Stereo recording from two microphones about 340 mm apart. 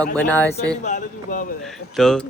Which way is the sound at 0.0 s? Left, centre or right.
Centre.